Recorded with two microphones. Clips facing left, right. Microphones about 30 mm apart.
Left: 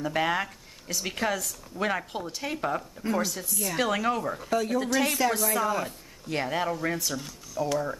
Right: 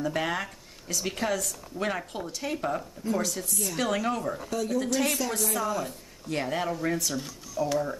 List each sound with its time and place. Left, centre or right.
0.0 s speech: centre
4.5 s speech: left; by 8.0 s centre